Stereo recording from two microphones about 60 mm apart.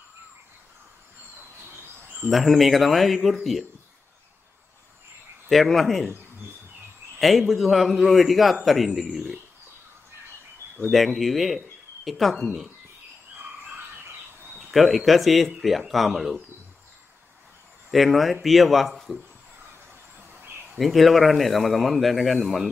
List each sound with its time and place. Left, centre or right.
2.2 s a man's voice: centre
5.5 s a man's voice: centre
7.2 s a man's voice: centre
10.8 s speech: centre
14.7 s a man's voice: centre
17.9 s a man's voice: centre
20.3 s a sound: right
20.7 s a man's voice: centre